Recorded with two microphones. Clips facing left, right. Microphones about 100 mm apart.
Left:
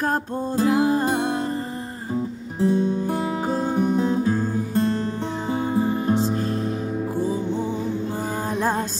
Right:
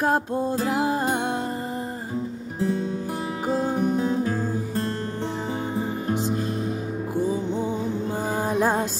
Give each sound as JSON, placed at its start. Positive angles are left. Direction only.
{"t": 0.8, "sound": "music", "side_deg": -10}
{"t": 2.6, "sound": "music", "side_deg": 30}
{"t": 3.4, "sound": "music", "side_deg": -10}
{"t": 4.1, "sound": "music", "side_deg": 20}
{"t": 8.5, "sound": "music", "side_deg": -10}